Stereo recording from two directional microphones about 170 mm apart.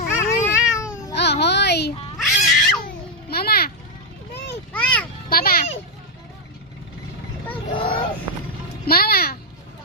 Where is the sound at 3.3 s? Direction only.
65° left (ahead or behind).